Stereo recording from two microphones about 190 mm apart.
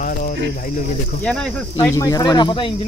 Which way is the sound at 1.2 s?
5° left (ahead or behind).